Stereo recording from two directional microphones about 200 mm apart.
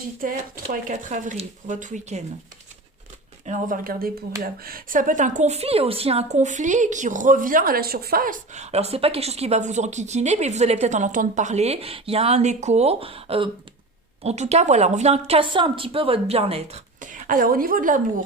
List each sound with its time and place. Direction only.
0.2 s a woman's voice: 45° right (ahead or behind)
3.4 s a woman's voice: 40° right (ahead or behind)